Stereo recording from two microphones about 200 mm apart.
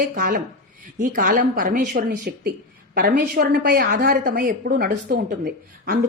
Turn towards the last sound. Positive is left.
turn(degrees=-45)  # may be behind; listen again after turning